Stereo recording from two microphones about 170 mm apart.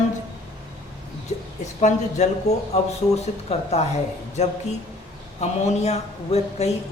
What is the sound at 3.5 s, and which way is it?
Speech, 40° left (ahead or behind).